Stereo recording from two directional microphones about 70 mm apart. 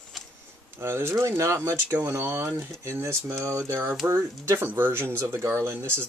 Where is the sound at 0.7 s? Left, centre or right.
Right.